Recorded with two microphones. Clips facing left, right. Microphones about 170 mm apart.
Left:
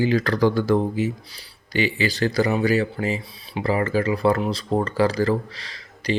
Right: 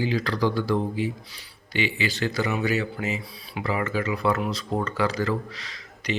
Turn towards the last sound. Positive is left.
turn(degrees=35)  # may be behind; listen again after turning